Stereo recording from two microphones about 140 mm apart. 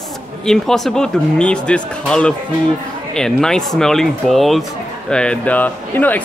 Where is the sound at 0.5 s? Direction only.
5° left (ahead or behind).